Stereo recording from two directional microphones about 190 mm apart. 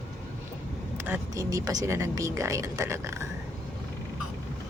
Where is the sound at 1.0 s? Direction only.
15° right (ahead or behind).